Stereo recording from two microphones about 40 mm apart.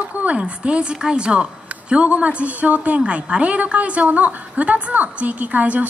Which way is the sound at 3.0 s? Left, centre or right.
Right.